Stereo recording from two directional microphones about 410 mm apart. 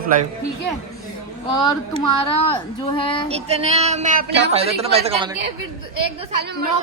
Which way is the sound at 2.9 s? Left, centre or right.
Centre.